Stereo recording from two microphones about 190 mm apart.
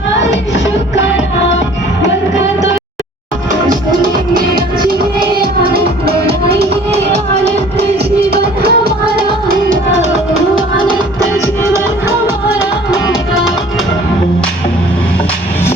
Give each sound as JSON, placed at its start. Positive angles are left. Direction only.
{"t": 8.3, "sound": "music", "side_deg": -55}